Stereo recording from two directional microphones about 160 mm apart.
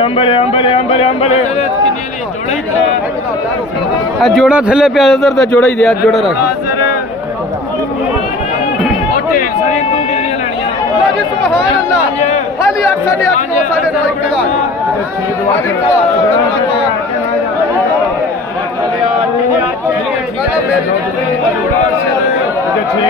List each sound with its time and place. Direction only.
0.0 s speech: 35° left (ahead or behind)
4.2 s a man's voice: centre (ahead or behind)